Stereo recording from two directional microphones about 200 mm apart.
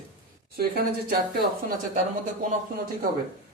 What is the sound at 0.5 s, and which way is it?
Speech, 50° right (ahead or behind).